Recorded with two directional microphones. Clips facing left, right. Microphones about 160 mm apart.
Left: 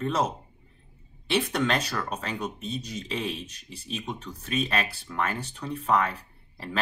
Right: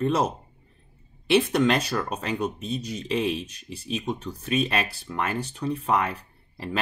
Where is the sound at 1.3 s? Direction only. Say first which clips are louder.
Right 5 dB; 10° right (ahead or behind).